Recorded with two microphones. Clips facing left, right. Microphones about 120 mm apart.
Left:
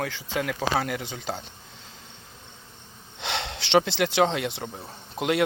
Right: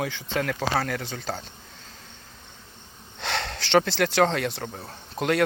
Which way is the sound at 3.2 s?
20° left (ahead or behind).